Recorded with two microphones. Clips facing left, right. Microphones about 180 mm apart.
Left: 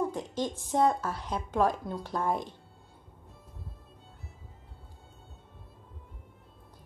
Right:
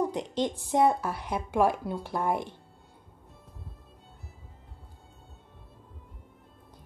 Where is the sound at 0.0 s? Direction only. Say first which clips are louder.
Right 2 dB; 15° right (ahead or behind).